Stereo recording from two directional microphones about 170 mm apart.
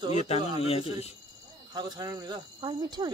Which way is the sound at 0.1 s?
40° left (ahead or behind).